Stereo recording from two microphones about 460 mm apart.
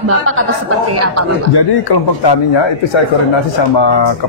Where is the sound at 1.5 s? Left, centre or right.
Left.